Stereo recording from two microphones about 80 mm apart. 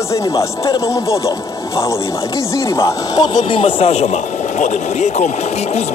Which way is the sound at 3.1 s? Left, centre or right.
Left.